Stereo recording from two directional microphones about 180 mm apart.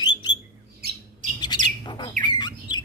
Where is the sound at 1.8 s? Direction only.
25° left (ahead or behind).